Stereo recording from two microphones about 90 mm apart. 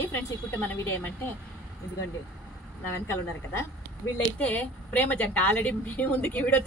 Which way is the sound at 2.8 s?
25° left (ahead or behind).